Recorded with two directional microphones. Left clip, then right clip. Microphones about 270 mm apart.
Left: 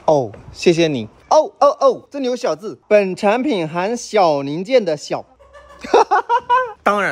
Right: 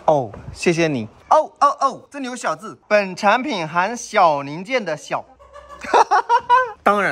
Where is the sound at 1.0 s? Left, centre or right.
Centre.